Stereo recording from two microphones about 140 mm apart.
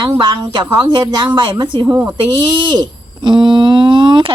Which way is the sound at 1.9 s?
10° right (ahead or behind).